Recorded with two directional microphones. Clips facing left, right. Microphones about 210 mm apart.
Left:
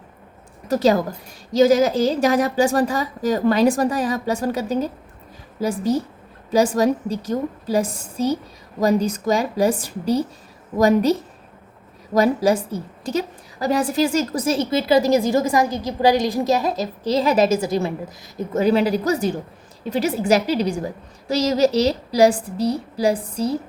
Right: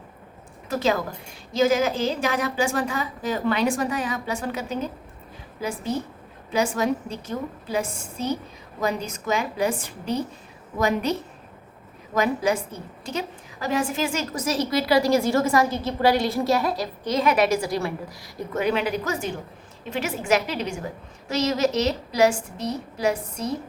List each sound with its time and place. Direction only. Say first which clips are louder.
0.7 s a woman's voice: left 6 dB; 40° left (ahead or behind); by 16.9 s 20° left (ahead or behind)
17.0 s a woman's voice: left 4 dB; 35° left (ahead or behind)
18.5 s a woman's voice: left 6 dB; 35° left (ahead or behind)